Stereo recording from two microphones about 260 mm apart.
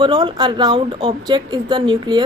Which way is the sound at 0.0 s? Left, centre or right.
Centre.